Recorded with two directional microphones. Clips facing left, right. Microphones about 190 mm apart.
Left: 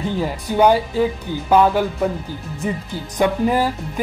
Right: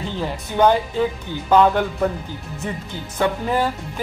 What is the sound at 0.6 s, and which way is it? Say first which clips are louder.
Speech: left 2 dB; 10° left (ahead or behind).